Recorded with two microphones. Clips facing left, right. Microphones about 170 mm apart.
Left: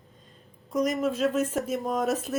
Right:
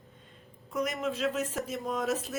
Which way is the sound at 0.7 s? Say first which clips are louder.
Left 6 dB; 40° left (ahead or behind).